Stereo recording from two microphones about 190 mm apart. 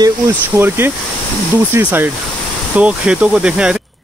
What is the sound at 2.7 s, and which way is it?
Speech, 5° right (ahead or behind).